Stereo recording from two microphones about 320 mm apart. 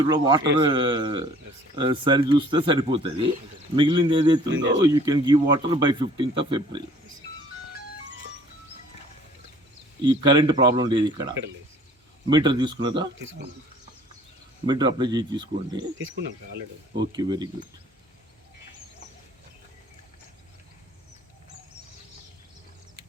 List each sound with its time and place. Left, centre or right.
0.0 s speech: centre
4.4 s speech: right
4.7 s speech: centre
10.0 s speech: centre
14.7 s speech: centre
17.0 s speech: centre